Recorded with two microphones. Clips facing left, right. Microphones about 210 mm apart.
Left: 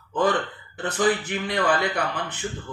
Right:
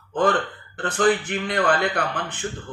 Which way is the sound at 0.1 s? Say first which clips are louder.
Right 2 dB; 55° right (ahead or behind).